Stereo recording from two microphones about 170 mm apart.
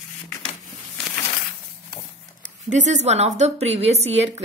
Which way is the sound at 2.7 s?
45° right (ahead or behind).